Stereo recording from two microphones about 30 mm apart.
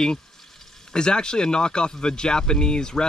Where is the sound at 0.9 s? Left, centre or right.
Left.